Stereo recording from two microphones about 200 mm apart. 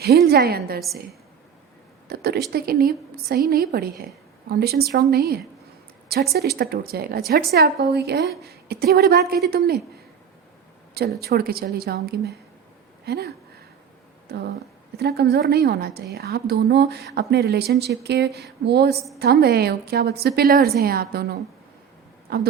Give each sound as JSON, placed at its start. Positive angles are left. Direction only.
{"t": 0.3, "sound": "a woman's voice", "side_deg": -50}
{"t": 2.0, "sound": "a sound", "side_deg": -50}
{"t": 2.5, "sound": "a woman's voice", "side_deg": -50}
{"t": 11.2, "sound": "a woman's voice", "side_deg": -50}